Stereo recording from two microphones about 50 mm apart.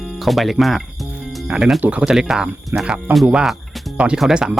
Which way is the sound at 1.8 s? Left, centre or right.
Right.